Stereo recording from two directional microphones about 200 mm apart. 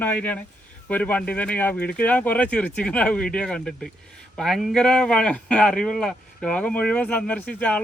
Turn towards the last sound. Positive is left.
turn(degrees=10)  # may be behind; listen again after turning